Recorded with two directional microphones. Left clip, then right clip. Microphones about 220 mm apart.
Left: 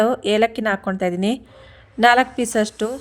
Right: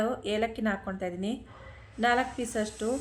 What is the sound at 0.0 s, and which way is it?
Speech, 50° left (ahead or behind).